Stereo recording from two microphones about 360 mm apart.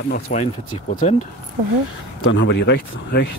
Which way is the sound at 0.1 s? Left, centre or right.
Centre.